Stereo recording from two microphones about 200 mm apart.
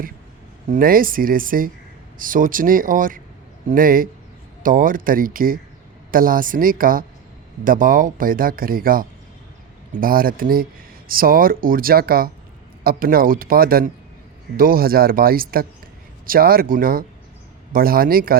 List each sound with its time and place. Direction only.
0.7 s speech: 45° right (ahead or behind)